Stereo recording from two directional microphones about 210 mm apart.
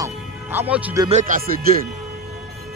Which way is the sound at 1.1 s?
40° right (ahead or behind).